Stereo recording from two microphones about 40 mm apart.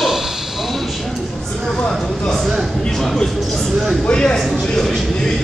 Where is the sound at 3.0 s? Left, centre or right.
Centre.